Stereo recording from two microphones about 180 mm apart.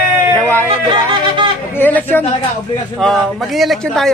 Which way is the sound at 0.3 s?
10° left (ahead or behind).